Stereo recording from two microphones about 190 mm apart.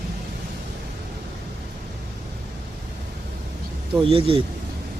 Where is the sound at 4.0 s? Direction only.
30° right (ahead or behind).